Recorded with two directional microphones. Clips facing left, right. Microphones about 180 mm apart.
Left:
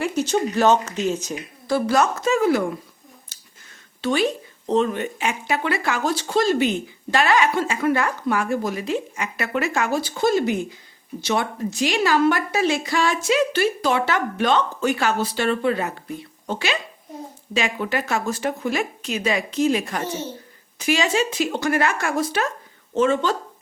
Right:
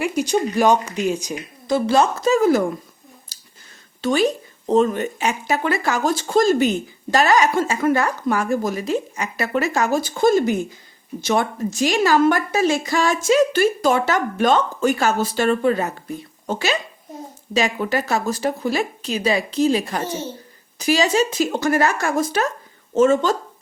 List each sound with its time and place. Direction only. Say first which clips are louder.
0.0 s speech: right 1 dB; 10° right (ahead or behind); by 2.6 s 40° right (ahead or behind)
3.3 s a sound: right 1 dB; 35° right (ahead or behind)
4.0 s speech: right 3 dB; 45° right (ahead or behind)